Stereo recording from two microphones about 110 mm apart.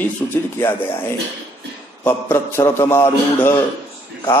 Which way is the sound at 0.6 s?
20° left (ahead or behind).